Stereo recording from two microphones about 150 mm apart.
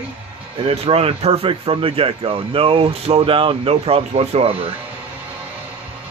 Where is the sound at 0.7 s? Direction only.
40° right (ahead or behind).